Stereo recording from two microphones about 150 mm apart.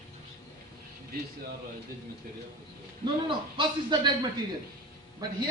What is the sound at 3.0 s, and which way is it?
A man's voice, 30° right (ahead or behind).